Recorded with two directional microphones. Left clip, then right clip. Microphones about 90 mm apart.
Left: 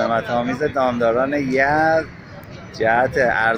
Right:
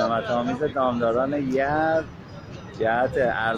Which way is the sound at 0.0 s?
30° left (ahead or behind).